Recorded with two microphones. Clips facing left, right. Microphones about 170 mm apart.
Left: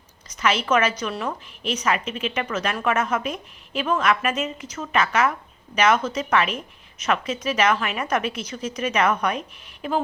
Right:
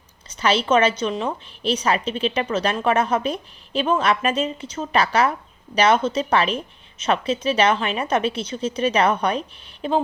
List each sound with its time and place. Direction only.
0.3 s a woman's voice: 30° right (ahead or behind)
1.6 s a woman's voice: 30° right (ahead or behind)